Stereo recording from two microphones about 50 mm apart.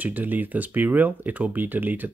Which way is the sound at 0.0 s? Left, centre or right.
Right.